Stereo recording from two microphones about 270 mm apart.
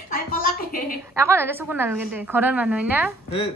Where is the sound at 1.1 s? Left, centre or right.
Centre.